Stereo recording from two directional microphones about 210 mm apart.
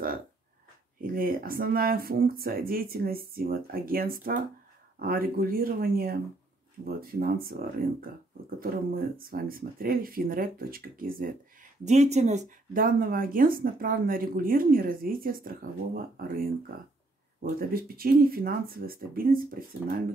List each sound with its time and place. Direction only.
1.1 s speech: 45° right (ahead or behind)
17.6 s speech: 45° right (ahead or behind)